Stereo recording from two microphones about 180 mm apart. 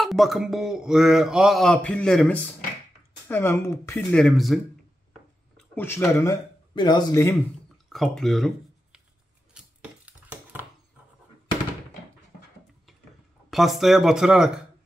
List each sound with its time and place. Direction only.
0.0 s a man's voice: centre (ahead or behind)
4.2 s a man's voice: centre (ahead or behind)
5.8 s a man's voice: 15° left (ahead or behind)
7.7 s a sound: centre (ahead or behind)
13.5 s a man's voice: centre (ahead or behind)